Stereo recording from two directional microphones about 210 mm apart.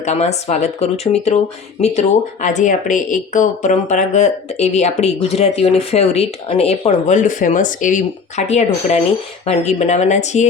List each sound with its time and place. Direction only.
0.0 s speech: 30° left (ahead or behind)